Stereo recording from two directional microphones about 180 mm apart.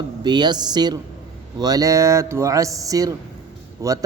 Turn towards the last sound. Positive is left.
turn(degrees=-20)  # may be behind; listen again after turning